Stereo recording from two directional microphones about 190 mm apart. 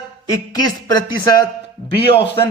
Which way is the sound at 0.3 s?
20° left (ahead or behind).